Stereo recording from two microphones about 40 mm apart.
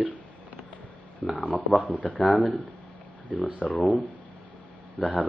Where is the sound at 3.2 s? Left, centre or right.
Left.